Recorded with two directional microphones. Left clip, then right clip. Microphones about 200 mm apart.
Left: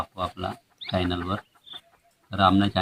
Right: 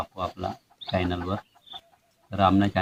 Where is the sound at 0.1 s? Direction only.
Centre (ahead or behind).